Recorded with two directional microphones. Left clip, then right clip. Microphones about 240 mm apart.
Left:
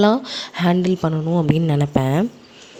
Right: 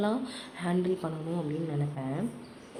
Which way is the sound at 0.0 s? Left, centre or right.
Left.